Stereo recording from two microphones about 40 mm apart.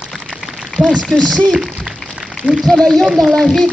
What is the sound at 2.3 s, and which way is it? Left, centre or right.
Speech, centre.